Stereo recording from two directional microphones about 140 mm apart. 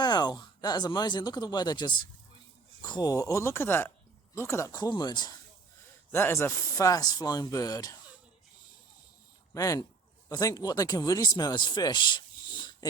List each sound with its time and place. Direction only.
0.0 s speech: 30° left (ahead or behind)
6.1 s speech: 15° left (ahead or behind)
9.6 s speech: 25° left (ahead or behind)